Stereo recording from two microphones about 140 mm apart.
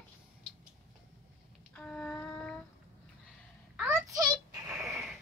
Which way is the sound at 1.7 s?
10° left (ahead or behind).